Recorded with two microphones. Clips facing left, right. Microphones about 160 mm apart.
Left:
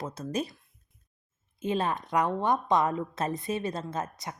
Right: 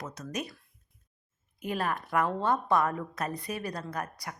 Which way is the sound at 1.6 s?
20° left (ahead or behind).